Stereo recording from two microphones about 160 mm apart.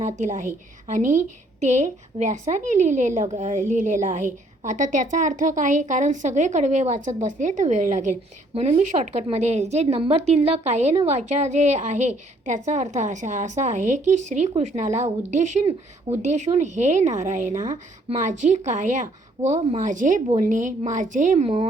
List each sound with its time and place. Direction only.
0.0 s a woman's voice: 50° right (ahead or behind)